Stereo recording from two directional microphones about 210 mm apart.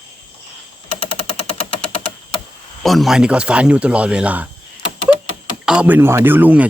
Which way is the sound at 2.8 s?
Centre (ahead or behind).